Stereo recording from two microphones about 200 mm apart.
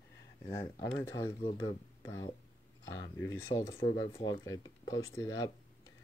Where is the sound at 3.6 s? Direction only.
30° left (ahead or behind).